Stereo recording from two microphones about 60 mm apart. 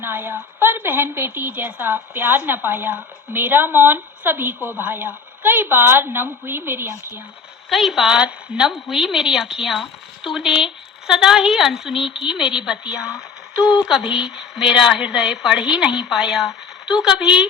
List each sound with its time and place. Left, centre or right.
0.0 s a woman's voice: right
7.7 s a woman's voice: centre